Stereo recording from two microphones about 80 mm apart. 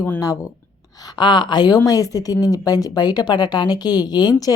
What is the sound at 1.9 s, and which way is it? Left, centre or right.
Speech, left.